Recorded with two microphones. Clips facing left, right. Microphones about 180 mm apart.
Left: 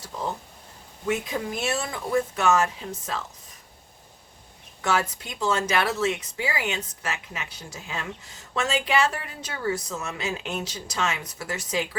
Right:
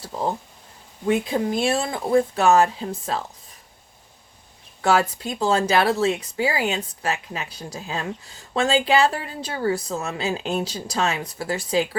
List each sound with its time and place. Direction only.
0.0 s a sound: 35° right (ahead or behind)
1.0 s speech: 30° right (ahead or behind)
4.8 s speech: 35° right (ahead or behind)